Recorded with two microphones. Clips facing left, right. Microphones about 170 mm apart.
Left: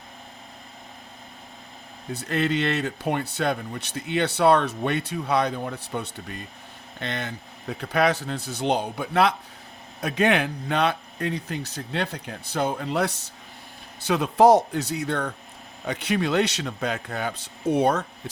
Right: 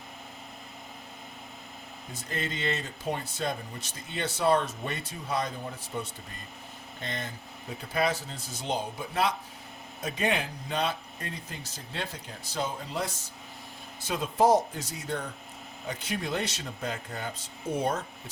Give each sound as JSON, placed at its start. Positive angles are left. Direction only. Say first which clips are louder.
{"t": 2.1, "sound": "speech", "louder": "left 11 dB", "side_deg": 70}